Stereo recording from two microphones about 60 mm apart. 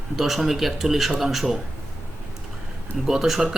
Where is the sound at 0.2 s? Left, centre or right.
Centre.